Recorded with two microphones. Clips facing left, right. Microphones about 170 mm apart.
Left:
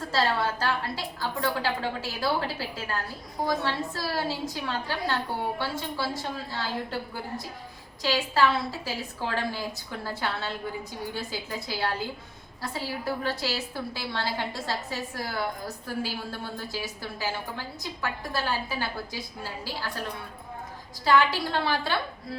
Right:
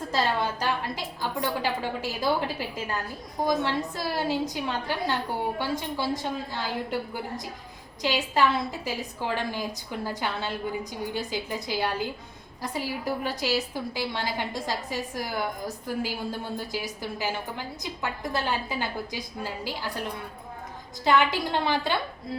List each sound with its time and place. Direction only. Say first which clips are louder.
0.1 s a woman's voice: even; 15° right (ahead or behind)
8.0 s a woman's voice: even; 15° right (ahead or behind)
21.0 s a woman's voice: even; 20° right (ahead or behind)